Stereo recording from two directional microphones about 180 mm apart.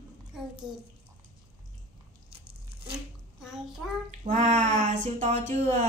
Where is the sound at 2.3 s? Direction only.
30° right (ahead or behind).